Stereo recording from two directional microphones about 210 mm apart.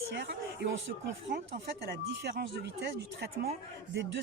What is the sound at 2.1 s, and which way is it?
Speech, 50° right (ahead or behind).